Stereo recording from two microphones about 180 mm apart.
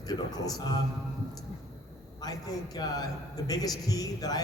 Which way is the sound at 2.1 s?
20° left (ahead or behind).